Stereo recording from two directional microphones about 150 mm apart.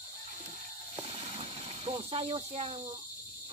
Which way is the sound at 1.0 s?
45° right (ahead or behind).